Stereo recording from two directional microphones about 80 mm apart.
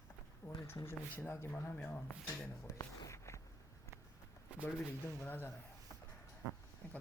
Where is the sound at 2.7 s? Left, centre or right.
Left.